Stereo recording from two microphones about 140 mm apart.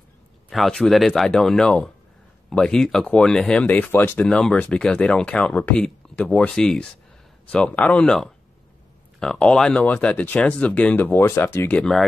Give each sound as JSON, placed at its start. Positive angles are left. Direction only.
{"t": 0.5, "sound": "speech", "side_deg": 0}